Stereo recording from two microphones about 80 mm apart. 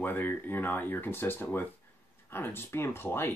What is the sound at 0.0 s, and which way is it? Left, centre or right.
Speech, left.